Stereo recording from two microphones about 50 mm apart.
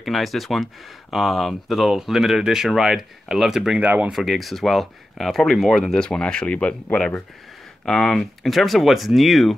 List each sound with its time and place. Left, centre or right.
0.0 s speech: centre
3.7 s speech: right
4.1 s speech: centre; by 7.2 s left
7.8 s speech: centre